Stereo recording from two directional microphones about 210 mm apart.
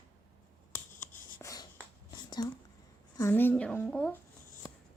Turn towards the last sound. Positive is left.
turn(degrees=5)  # may be behind; listen again after turning